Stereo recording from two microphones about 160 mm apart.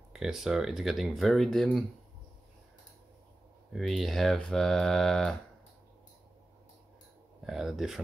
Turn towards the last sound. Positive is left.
turn(degrees=0)  # may be behind; listen again after turning